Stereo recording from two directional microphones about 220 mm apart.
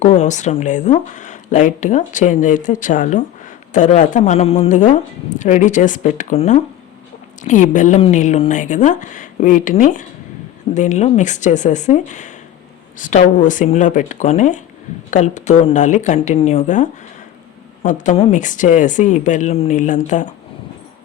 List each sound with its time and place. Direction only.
0.0 s speech: 30° left (ahead or behind)